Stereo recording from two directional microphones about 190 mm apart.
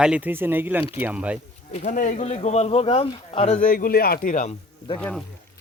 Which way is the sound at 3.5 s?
45° left (ahead or behind).